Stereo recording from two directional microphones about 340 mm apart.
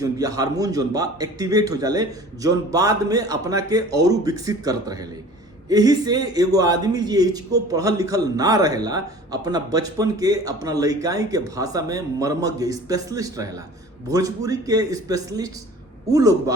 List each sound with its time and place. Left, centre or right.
0.0 s a man's voice: centre